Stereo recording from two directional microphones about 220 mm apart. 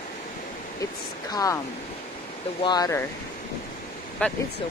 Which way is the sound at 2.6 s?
15° left (ahead or behind).